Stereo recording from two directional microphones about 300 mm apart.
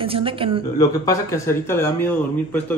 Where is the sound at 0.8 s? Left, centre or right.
Centre.